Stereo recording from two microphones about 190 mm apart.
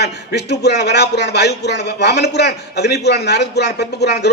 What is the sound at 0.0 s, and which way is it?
A man's voice, 60° left (ahead or behind).